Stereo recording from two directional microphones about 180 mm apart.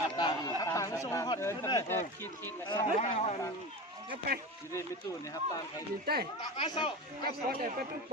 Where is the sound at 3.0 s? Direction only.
35° left (ahead or behind).